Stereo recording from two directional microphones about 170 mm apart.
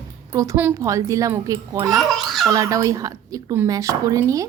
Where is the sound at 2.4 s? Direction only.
20° right (ahead or behind).